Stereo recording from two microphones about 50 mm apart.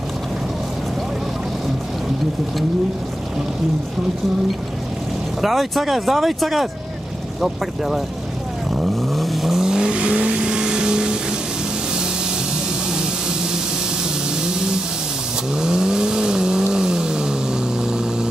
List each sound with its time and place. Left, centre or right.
5.4 s speech: centre
9.1 s vehicle: centre
14.4 s vehicle: centre